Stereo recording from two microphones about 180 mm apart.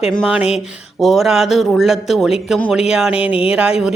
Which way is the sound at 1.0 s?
Centre (ahead or behind).